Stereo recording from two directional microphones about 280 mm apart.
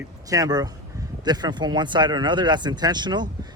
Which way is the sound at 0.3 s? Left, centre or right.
Centre.